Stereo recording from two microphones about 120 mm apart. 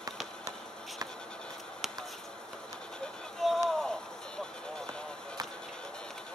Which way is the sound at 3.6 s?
Centre (ahead or behind).